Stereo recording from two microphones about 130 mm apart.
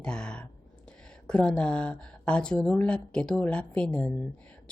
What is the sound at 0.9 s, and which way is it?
A woman's voice, 10° left (ahead or behind).